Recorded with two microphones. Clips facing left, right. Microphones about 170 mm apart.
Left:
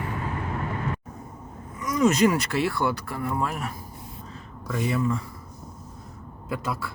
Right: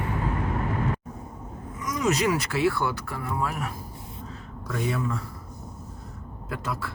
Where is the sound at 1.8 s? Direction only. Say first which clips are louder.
Left 4 dB; centre (ahead or behind).